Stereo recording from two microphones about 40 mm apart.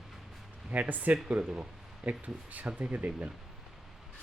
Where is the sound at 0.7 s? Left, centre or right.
Right.